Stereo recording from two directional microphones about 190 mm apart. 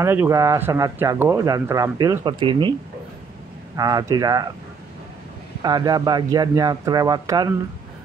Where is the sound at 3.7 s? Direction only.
20° right (ahead or behind).